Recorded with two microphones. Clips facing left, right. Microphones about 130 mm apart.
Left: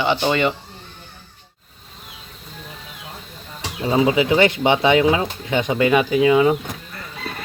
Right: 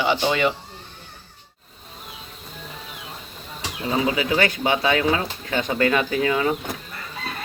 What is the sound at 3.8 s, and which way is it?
Speech, 25° left (ahead or behind).